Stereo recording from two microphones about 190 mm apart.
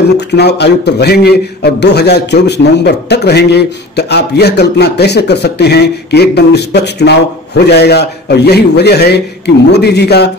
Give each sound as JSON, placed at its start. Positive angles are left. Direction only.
{"t": 0.4, "sound": "a man's voice", "side_deg": 60}